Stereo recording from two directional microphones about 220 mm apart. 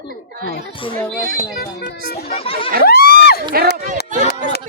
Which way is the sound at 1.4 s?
45° left (ahead or behind).